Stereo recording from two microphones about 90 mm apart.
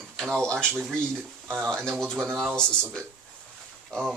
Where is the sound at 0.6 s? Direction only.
20° right (ahead or behind).